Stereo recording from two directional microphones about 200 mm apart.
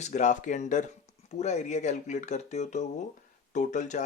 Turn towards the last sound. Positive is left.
turn(degrees=35)  # may be behind; listen again after turning